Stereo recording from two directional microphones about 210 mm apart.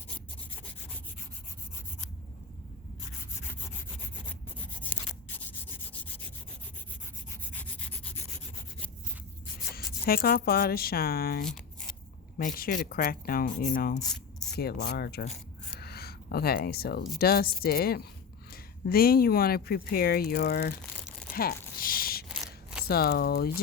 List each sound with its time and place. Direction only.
7.5 s rub: 5° left (ahead or behind)
9.7 s speech: 45° left (ahead or behind)
11.4 s a sound: 5° left (ahead or behind)
12.4 s speech: 40° left (ahead or behind)
21.3 s a sound: 45° left (ahead or behind)
22.9 s speech: 45° left (ahead or behind)